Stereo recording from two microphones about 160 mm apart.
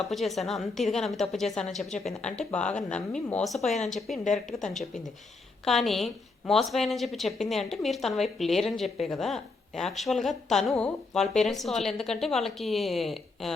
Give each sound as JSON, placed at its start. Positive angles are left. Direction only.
{"t": 0.0, "sound": "a woman's voice", "side_deg": 0}
{"t": 3.6, "sound": "speech", "side_deg": 45}
{"t": 4.6, "sound": "a woman's voice", "side_deg": 0}